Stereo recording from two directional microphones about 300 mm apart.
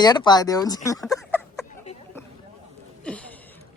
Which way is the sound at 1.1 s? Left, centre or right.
Centre.